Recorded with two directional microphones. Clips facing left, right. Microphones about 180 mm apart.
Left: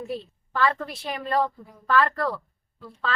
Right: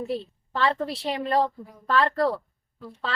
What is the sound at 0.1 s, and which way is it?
A woman's voice, 25° right (ahead or behind).